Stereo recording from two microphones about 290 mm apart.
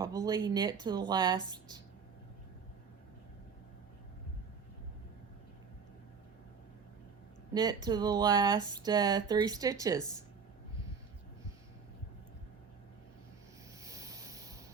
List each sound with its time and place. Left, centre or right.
0.0 s speech: centre
7.5 s speech: centre
13.8 s a sound: centre